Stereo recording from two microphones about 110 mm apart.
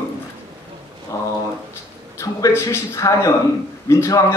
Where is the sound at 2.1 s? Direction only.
30° left (ahead or behind).